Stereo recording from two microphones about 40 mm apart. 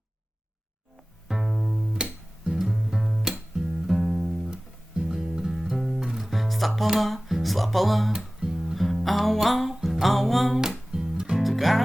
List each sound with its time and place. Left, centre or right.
1.3 s music: centre
1.5 s music: centre
1.9 s music: right
3.1 s music: centre
6.1 s music: centre
7.3 s speech: centre
8.5 s music: centre
10.6 s music: centre
11.3 s music: centre